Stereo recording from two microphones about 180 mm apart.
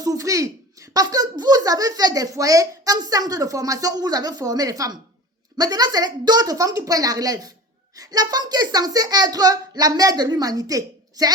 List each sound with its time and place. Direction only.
0.0 s a child's voice: 20° right (ahead or behind)